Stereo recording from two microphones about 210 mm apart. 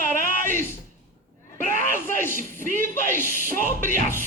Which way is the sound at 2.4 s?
40° right (ahead or behind).